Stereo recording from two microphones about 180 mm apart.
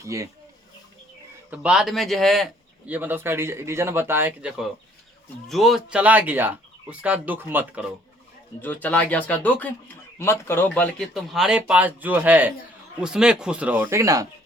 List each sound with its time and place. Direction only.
0.0 s a man's voice: 15° right (ahead or behind)
1.5 s a man's voice: 5° right (ahead or behind)
8.6 s a man's voice: 10° left (ahead or behind); by 14.3 s 20° right (ahead or behind)